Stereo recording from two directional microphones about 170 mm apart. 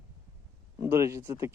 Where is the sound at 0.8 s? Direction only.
15° right (ahead or behind).